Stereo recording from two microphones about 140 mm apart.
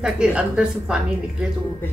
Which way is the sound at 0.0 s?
5° right (ahead or behind).